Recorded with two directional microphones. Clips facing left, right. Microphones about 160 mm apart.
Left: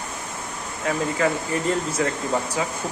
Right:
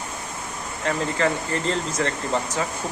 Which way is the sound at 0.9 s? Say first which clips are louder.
Left 1 dB; 5° left (ahead or behind).